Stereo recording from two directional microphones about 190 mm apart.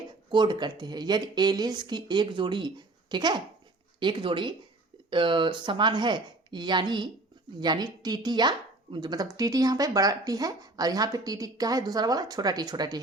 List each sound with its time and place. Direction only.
0.3 s a woman's voice: 25° right (ahead or behind)